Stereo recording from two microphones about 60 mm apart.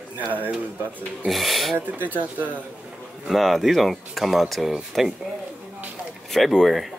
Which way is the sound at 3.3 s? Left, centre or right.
Centre.